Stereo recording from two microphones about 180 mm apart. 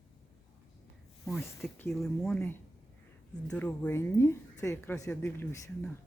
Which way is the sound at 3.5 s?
10° left (ahead or behind).